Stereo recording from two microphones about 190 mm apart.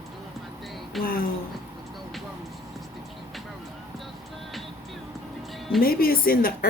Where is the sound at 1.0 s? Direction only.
50° left (ahead or behind).